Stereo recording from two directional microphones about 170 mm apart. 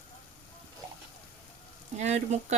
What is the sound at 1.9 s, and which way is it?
Speech, 40° right (ahead or behind).